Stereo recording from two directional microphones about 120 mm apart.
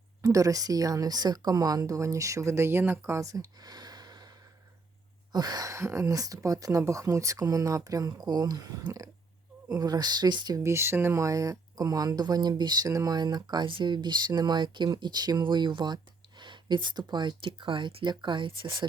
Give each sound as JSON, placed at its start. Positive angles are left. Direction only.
{"t": 0.2, "sound": "a woman's voice", "side_deg": -25}
{"t": 5.3, "sound": "a woman's voice", "side_deg": -35}